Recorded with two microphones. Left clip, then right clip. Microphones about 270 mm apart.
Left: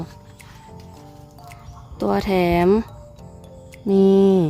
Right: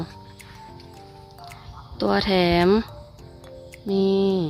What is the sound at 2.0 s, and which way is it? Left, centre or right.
Speech, centre.